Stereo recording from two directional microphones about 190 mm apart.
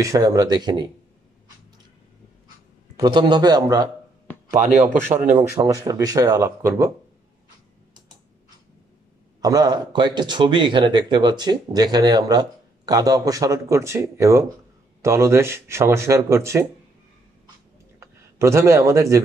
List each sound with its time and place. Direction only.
0.0 s a man's voice: 20° right (ahead or behind)
3.0 s a man's voice: 25° right (ahead or behind)
5.0 s speech: 40° right (ahead or behind)
5.9 s speech: 20° right (ahead or behind)
9.4 s a man's voice: 20° right (ahead or behind)
17.9 s speech: 15° right (ahead or behind)